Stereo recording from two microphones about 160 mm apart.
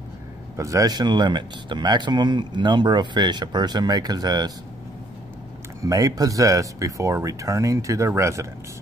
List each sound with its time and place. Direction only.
0.6 s speech: 20° right (ahead or behind)
5.8 s speech: 20° right (ahead or behind)